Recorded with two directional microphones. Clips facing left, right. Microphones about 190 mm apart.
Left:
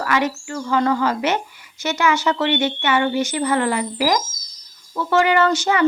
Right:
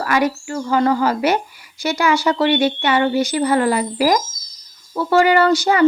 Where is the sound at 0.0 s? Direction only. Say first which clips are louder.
Right 3 dB; 30° right (ahead or behind).